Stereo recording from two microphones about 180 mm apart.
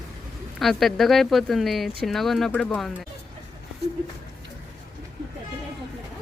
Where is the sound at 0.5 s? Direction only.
Centre (ahead or behind).